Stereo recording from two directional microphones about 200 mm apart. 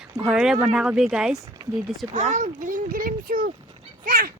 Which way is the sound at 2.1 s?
35° right (ahead or behind).